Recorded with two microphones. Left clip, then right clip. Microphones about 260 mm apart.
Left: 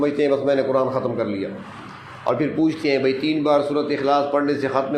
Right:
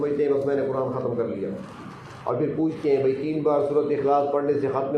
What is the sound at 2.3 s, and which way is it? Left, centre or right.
A man's voice, left.